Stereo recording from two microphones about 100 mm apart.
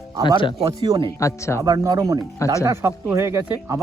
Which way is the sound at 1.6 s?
35° right (ahead or behind).